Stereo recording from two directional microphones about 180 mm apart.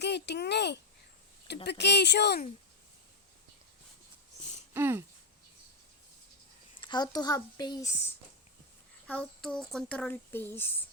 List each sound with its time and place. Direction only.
0.0 s speech: 70° left (ahead or behind)
1.8 s speech: 70° left (ahead or behind)
4.7 s a sound: 15° right (ahead or behind)
6.8 s a child's voice: 25° left (ahead or behind)
9.0 s speech: 5° left (ahead or behind)